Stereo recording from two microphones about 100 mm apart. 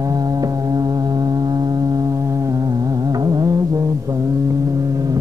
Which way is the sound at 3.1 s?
40° right (ahead or behind).